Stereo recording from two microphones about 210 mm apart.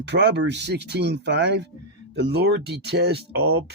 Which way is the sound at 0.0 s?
55° right (ahead or behind).